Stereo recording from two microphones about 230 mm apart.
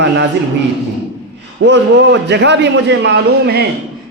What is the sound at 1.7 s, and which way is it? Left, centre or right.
A man's voice, right.